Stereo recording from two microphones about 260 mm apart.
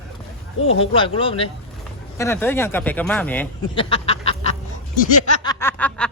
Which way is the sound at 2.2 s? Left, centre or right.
Centre.